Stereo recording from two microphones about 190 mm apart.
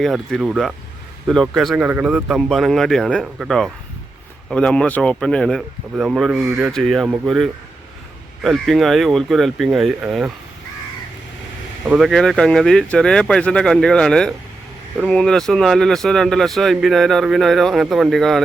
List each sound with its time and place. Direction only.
0.0 s speech: centre (ahead or behind)
11.9 s speech: centre (ahead or behind)